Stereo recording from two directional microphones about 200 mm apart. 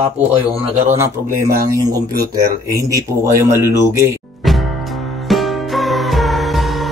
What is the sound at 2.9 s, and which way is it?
Speech, 15° right (ahead or behind).